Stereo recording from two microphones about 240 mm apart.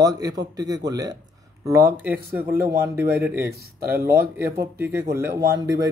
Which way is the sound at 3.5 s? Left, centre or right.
Right.